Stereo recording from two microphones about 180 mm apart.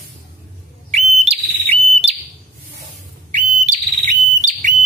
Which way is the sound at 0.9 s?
35° right (ahead or behind).